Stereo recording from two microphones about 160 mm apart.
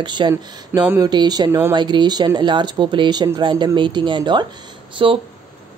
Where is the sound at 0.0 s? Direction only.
30° right (ahead or behind).